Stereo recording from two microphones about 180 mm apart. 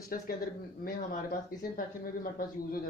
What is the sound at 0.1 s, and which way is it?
A woman's voice, 50° left (ahead or behind).